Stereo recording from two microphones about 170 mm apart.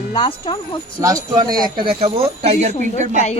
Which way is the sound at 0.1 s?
30° left (ahead or behind).